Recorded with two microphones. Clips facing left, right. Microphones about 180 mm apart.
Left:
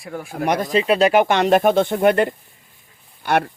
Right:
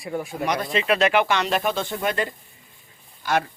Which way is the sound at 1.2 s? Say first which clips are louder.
Left 8 dB; 50° left (ahead or behind).